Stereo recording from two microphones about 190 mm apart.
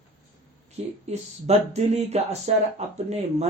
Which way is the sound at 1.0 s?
35° right (ahead or behind).